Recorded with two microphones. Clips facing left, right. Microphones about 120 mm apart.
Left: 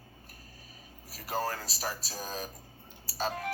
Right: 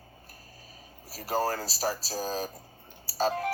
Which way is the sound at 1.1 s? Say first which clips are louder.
Right 5 dB; 35° right (ahead or behind).